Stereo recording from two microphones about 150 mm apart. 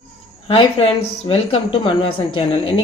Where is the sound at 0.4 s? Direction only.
40° left (ahead or behind).